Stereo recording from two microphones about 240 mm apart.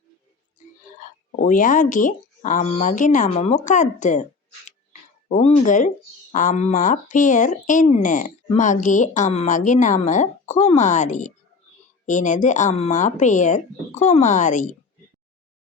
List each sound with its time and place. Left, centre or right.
1.4 s speech: left
5.3 s speech: left